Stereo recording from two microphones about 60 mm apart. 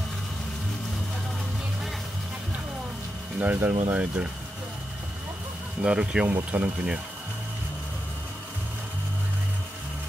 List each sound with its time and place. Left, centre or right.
3.3 s speech: right
5.8 s speech: centre